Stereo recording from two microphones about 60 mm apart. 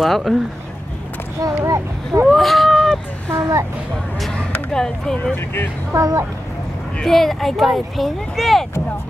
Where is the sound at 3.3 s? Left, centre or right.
Right.